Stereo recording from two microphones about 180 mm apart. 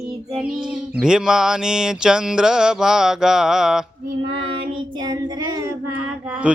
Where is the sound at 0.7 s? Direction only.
5° right (ahead or behind).